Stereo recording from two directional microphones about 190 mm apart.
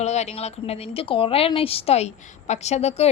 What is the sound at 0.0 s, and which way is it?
Speech, 35° left (ahead or behind).